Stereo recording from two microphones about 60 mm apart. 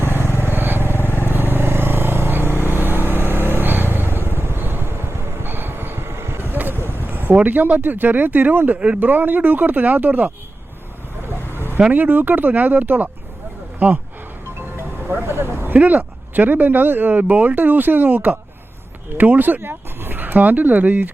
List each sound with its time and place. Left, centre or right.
0.0 s vehicle: right
7.3 s speech: right
11.5 s vehicle: right
11.9 s speech: right
14.6 s speech: right